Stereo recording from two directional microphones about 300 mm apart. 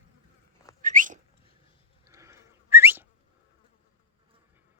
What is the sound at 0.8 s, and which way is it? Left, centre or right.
Whistling, right.